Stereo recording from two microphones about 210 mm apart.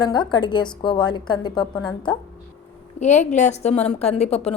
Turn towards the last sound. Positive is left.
turn(degrees=30)  # may be behind; listen again after turning